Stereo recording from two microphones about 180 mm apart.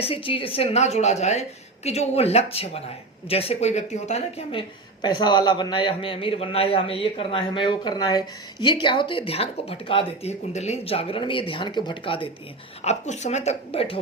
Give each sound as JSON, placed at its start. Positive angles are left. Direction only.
{"t": 0.0, "sound": "a woman's voice", "side_deg": 30}
{"t": 5.0, "sound": "speech", "side_deg": 25}
{"t": 12.8, "sound": "a woman's voice", "side_deg": 40}